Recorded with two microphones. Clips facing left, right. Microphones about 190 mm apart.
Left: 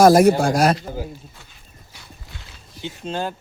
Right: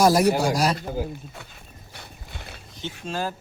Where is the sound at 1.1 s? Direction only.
60° right (ahead or behind).